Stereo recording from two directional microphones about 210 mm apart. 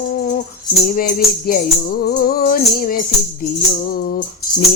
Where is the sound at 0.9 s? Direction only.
45° left (ahead or behind).